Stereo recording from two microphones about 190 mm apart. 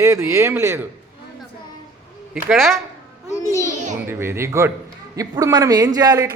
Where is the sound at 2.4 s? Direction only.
Centre (ahead or behind).